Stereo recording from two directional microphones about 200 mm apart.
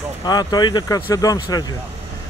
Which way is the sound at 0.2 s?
20° left (ahead or behind).